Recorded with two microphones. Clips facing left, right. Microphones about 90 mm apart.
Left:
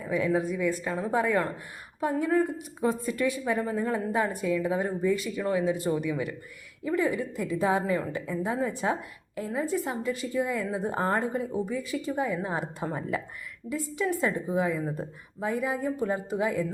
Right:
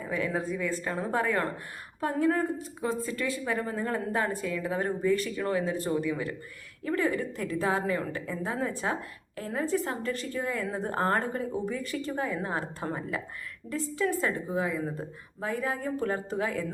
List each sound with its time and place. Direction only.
0.3 s a woman's voice: 15° left (ahead or behind)
13.7 s a woman's voice: 5° left (ahead or behind)
14.0 s a woman's voice: 20° left (ahead or behind)